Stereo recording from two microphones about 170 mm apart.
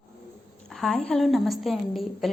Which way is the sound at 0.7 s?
Centre (ahead or behind).